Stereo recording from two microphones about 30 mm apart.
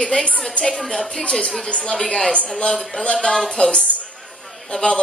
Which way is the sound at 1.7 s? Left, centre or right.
Left.